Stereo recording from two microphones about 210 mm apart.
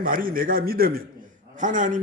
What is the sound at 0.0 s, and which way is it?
A man's voice, 40° right (ahead or behind).